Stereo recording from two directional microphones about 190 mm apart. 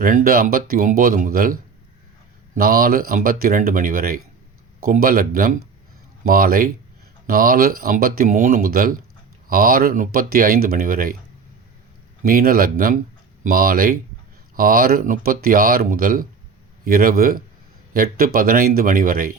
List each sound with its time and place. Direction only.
0.0 s speech: 45° right (ahead or behind)
2.6 s speech: 50° right (ahead or behind)
12.2 s speech: 50° right (ahead or behind)